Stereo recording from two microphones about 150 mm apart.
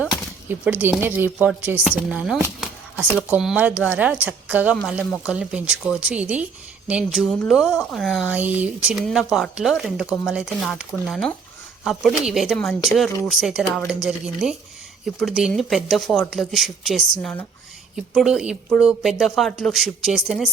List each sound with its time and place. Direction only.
0.4 s speech: 10° right (ahead or behind)
2.6 s a sound: 5° right (ahead or behind)
3.2 s speech: 10° right (ahead or behind)
8.3 s speech: 10° right (ahead or behind)